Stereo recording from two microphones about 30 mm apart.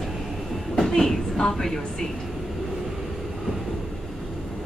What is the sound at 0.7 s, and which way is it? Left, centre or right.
Train, centre.